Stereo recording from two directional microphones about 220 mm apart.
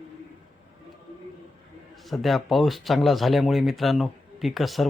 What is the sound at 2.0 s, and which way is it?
Speech, centre (ahead or behind).